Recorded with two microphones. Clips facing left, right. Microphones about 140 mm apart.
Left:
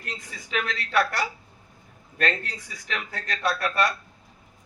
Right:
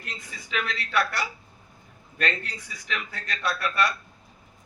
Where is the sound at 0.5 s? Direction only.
40° left (ahead or behind).